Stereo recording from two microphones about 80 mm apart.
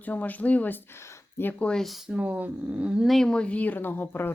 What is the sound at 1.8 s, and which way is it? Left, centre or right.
Speech, centre.